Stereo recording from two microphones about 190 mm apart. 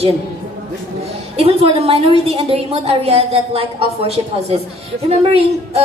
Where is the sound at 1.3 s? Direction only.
30° right (ahead or behind).